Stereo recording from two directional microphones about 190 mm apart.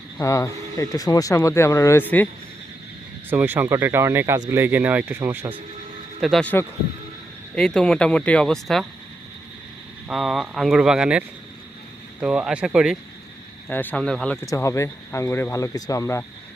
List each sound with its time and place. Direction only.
0.2 s speech: 15° left (ahead or behind)
3.2 s speech: 10° right (ahead or behind)
6.2 s speech: 5° left (ahead or behind)
10.1 s speech: centre (ahead or behind)
12.2 s speech: 5° right (ahead or behind)
13.7 s speech: 10° left (ahead or behind)
14.4 s speech: 15° left (ahead or behind)